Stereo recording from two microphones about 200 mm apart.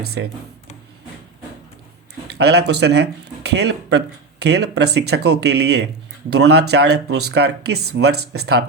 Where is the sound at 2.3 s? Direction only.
55° right (ahead or behind).